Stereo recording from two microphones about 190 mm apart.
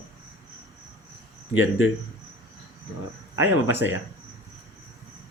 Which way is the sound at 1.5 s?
85° left.